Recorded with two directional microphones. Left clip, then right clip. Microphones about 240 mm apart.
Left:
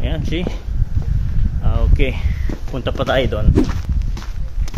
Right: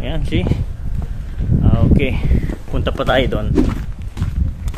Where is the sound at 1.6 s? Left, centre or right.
Centre.